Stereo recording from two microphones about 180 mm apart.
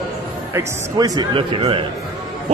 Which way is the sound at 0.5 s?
15° right (ahead or behind).